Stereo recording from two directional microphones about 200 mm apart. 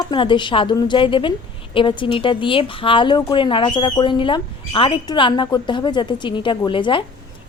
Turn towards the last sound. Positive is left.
turn(degrees=25)  # may be behind; listen again after turning